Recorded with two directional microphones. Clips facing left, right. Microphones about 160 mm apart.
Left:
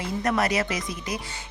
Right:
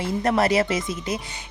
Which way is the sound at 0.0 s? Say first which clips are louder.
Right 4 dB; 30° right (ahead or behind).